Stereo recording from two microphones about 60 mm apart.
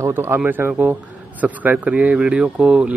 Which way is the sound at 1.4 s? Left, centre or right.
Right.